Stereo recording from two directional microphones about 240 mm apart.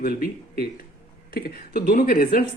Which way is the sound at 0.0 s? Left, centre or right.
Left.